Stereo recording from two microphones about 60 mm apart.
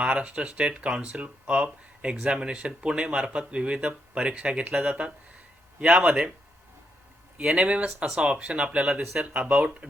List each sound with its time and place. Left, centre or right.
0.0 s speech: centre
7.3 s speech: right